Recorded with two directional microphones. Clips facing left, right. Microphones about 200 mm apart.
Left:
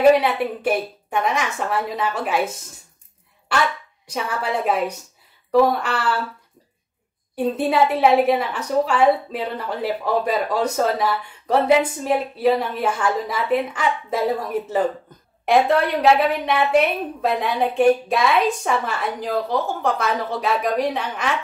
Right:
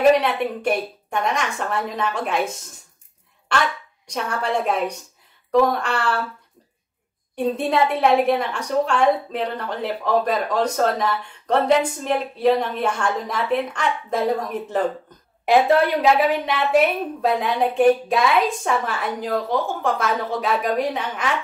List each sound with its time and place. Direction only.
0.1 s a woman's voice: 5° left (ahead or behind)
4.1 s a woman's voice: 5° left (ahead or behind)
7.3 s a woman's voice: 5° left (ahead or behind)
15.4 s a woman's voice: 5° right (ahead or behind)